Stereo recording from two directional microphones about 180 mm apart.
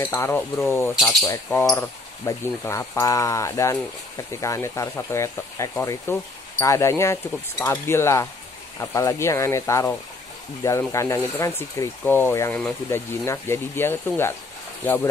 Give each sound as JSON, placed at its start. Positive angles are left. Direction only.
{"t": 0.0, "sound": "speech", "side_deg": 15}